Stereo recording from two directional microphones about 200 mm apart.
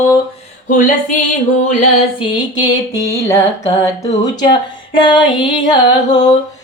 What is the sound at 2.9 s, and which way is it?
Music, 15° left (ahead or behind).